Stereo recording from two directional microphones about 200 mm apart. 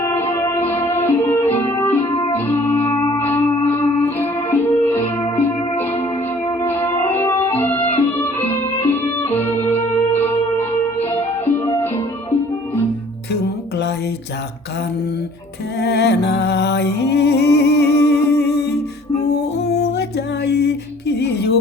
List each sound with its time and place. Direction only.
0.0 s music: 10° left (ahead or behind)
2.8 s singing bowl: 25° left (ahead or behind)
3.2 s music: 10° left (ahead or behind)
15.8 s music: 55° left (ahead or behind)
19.7 s music: 55° left (ahead or behind)